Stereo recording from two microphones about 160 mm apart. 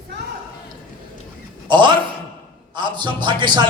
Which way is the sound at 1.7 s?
30° right (ahead or behind).